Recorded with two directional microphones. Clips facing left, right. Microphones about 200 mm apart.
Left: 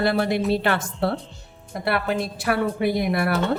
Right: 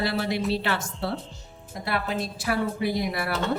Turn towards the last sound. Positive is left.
turn(degrees=55)  # may be behind; listen again after turning